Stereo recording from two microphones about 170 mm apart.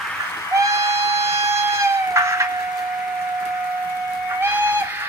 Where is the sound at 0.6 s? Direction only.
15° right (ahead or behind).